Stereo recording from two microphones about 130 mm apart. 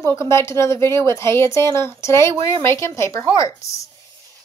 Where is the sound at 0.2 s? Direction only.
20° left (ahead or behind).